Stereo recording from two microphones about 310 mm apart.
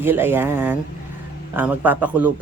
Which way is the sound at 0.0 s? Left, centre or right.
Centre.